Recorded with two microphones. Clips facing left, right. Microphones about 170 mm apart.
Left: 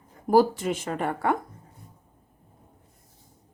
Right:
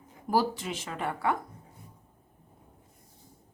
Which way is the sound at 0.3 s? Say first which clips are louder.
Left 8 dB; 50° left (ahead or behind).